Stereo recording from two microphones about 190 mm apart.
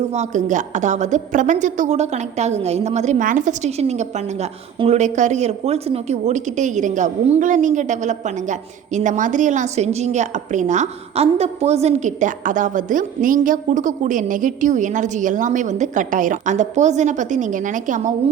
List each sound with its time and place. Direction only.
0.1 s a woman's voice: 40° right (ahead or behind)